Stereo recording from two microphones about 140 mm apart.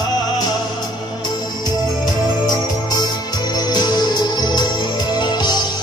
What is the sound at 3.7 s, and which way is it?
Music, 30° left (ahead or behind).